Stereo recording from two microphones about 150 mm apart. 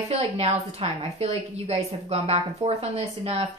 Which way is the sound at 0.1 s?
40° right (ahead or behind).